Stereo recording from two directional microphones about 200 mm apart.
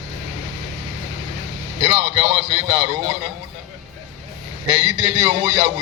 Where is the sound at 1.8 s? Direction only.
30° right (ahead or behind).